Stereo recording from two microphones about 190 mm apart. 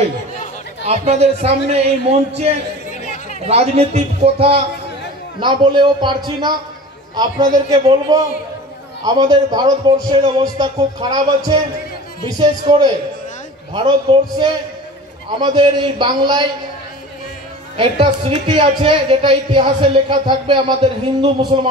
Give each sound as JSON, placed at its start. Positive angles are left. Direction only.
{"t": 0.8, "sound": "a man's voice", "side_deg": -35}
{"t": 2.9, "sound": "chatter", "side_deg": 40}
{"t": 3.4, "sound": "a man's voice", "side_deg": -35}
{"t": 17.7, "sound": "a woman's voice", "side_deg": -25}